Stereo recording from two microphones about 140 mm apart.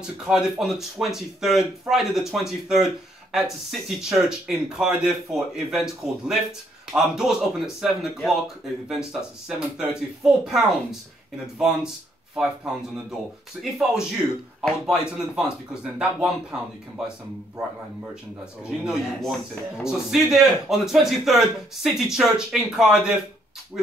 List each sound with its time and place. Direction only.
0.0 s speech: 5° right (ahead or behind)
12.9 s speech: centre (ahead or behind)
18.4 s speech: 5° right (ahead or behind)